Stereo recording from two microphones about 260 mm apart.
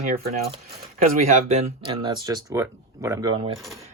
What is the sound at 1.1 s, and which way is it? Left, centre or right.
Speech, right.